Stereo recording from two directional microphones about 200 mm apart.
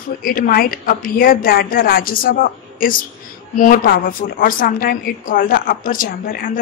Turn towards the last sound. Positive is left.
turn(degrees=45)  # may be behind; listen again after turning